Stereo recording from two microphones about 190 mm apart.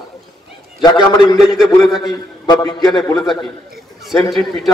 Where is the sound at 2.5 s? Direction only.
20° left (ahead or behind).